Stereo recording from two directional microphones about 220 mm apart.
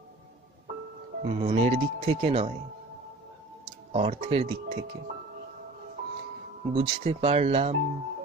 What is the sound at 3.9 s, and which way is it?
Speech, 25° right (ahead or behind).